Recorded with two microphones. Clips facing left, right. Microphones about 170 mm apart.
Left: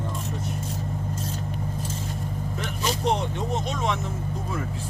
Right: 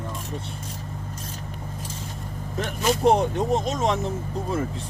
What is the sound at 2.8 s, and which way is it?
Speech, 50° right (ahead or behind).